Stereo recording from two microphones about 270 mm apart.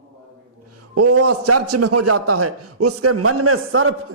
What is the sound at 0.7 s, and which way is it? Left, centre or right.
A man's voice, right.